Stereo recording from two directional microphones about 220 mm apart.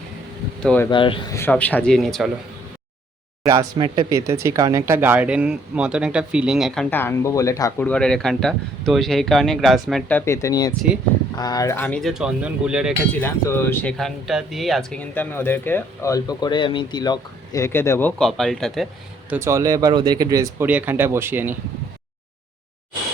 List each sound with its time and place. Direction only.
0.6 s speech: 5° left (ahead or behind)
0.9 s speech: 20° left (ahead or behind)
1.4 s speech: 10° left (ahead or behind)
3.4 s speech: 15° right (ahead or behind)
6.9 s speech: 10° left (ahead or behind)
13.2 s speech: 10° left (ahead or behind)
19.3 s speech: 10° right (ahead or behind)